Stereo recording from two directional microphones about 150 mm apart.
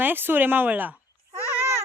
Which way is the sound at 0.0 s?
15° right (ahead or behind).